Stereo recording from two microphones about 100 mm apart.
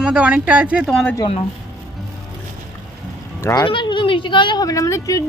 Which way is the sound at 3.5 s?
50° left (ahead or behind).